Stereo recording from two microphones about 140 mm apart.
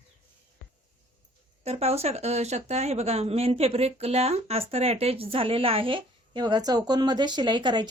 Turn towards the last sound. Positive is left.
turn(degrees=-35)  # may be behind; listen again after turning